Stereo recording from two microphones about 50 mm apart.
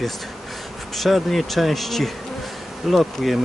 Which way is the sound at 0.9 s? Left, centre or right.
Centre.